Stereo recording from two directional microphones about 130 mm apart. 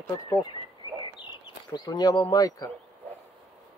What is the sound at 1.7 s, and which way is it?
Speech, 30° left (ahead or behind).